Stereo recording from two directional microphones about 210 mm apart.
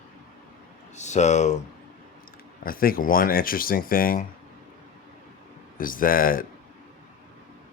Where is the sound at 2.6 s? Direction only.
45° left (ahead or behind).